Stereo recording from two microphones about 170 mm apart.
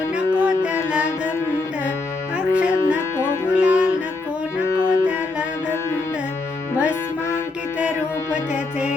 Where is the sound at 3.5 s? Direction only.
5° right (ahead or behind).